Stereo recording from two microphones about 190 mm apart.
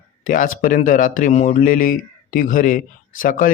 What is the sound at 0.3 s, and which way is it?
Speech, 45° left (ahead or behind).